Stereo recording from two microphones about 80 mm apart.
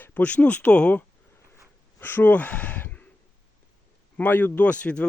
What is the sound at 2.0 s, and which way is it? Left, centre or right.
Speech, left.